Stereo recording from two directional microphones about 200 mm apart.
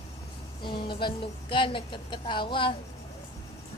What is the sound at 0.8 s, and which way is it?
Speech, 25° left (ahead or behind).